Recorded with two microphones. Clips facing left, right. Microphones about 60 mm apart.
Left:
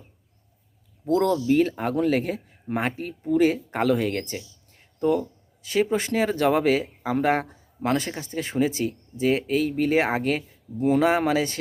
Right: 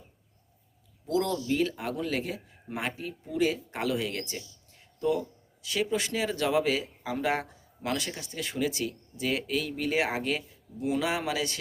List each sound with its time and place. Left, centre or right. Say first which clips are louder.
1.1 s speech: left 8 dB; left
4.8 s a sound: left 5 dB; left
5.6 s speech: left 6 dB; left